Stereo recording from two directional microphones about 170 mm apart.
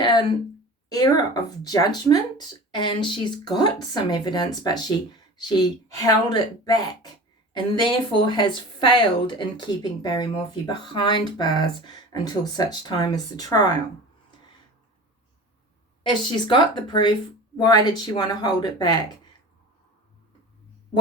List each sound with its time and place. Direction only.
0.0 s a sound: 25° left (ahead or behind)
0.9 s a woman's voice: 25° left (ahead or behind)
6.1 s a woman's voice: 25° left (ahead or behind)
16.3 s a woman's voice: 25° left (ahead or behind)